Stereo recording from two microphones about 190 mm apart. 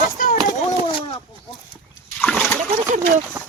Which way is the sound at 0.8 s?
30° left (ahead or behind).